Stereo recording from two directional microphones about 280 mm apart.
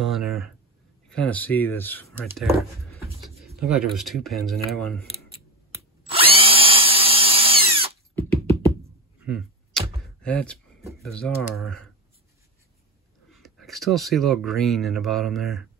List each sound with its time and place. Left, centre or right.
0.0 s speech: centre
5.8 s drill: centre
8.1 s beatboxing: centre
9.2 s arrow: centre
11.1 s speech: centre
13.3 s speech: centre